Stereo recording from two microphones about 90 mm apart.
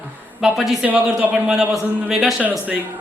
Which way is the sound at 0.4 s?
5° right (ahead or behind).